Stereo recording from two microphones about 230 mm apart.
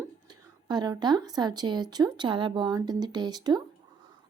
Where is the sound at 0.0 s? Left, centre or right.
Centre.